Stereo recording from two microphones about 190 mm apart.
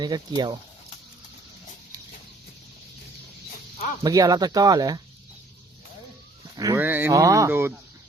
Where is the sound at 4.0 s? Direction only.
20° right (ahead or behind).